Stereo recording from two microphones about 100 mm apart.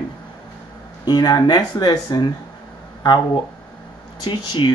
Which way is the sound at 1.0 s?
40° left (ahead or behind).